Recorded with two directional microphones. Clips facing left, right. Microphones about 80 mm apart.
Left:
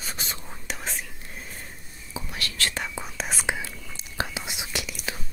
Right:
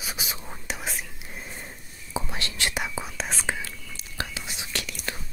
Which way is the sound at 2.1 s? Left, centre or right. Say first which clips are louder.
Right 3 dB; right.